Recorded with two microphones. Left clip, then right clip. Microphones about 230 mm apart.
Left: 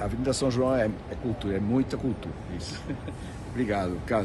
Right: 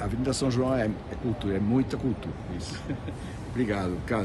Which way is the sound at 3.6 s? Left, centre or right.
Centre.